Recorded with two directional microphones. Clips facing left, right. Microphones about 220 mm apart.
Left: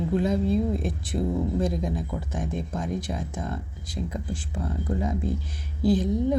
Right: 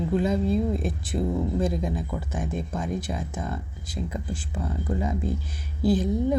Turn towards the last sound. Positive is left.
turn(degrees=-5)  # may be behind; listen again after turning